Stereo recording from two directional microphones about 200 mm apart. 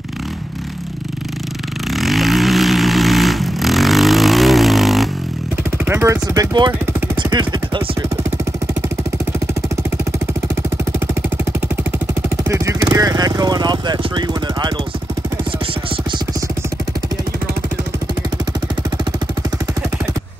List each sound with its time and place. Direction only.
1.9 s vehicle: centre (ahead or behind)
5.9 s speech: 15° right (ahead or behind)
6.9 s vehicle: 20° right (ahead or behind)
10.5 s jackhammer: 15° right (ahead or behind)
12.4 s a sound: 15° right (ahead or behind)